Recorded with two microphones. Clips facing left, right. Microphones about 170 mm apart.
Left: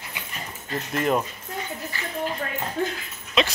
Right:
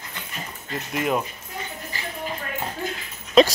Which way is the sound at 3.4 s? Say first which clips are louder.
Right 8 dB; 40° right (ahead or behind).